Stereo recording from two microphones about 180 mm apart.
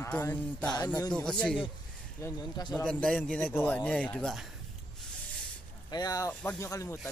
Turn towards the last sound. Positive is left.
turn(degrees=15)  # may be behind; listen again after turning